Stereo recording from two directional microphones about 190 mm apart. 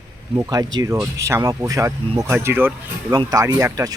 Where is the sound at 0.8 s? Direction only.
20° right (ahead or behind).